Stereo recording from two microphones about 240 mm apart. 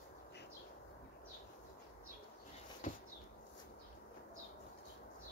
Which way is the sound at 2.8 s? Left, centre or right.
Left.